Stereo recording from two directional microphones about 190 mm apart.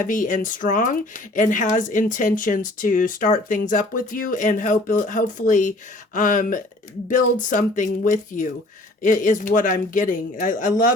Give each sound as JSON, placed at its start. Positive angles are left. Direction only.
{"t": 0.0, "sound": "speech", "side_deg": 45}